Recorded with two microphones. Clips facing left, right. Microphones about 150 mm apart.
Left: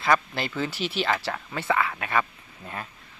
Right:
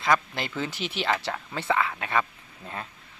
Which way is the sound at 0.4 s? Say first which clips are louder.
Left 2 dB; 20° right (ahead or behind).